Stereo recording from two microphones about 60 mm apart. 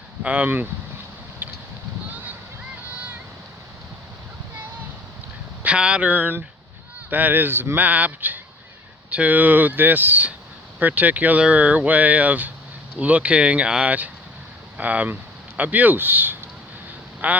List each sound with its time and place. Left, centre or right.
0.2 s speech: right
1.4 s a sound: right
5.6 s speech: centre